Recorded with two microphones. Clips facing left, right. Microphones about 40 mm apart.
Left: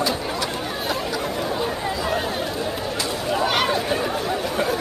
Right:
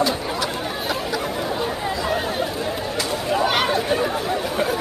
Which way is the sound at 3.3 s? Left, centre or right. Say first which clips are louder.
Right 1 dB; centre.